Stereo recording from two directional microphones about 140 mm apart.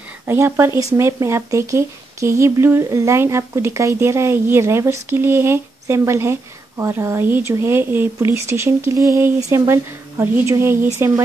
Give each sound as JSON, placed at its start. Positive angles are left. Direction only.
{"t": 0.3, "sound": "speech", "side_deg": -15}